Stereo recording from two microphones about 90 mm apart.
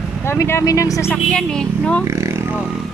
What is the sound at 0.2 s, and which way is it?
Speech, 30° left (ahead or behind).